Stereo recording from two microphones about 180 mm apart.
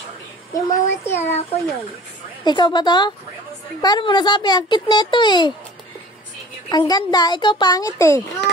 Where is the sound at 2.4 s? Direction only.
25° left (ahead or behind).